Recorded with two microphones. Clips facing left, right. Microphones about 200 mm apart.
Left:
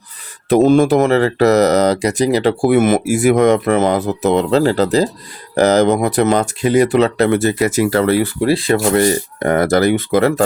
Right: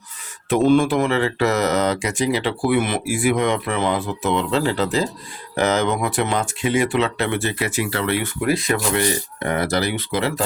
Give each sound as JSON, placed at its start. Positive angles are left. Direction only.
{"t": 0.5, "sound": "speech", "side_deg": 40}